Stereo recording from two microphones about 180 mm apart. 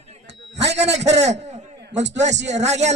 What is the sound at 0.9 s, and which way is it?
Speech, 40° right (ahead or behind).